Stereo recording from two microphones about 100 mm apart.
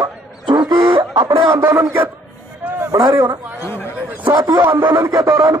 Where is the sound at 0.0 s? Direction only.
50° right (ahead or behind).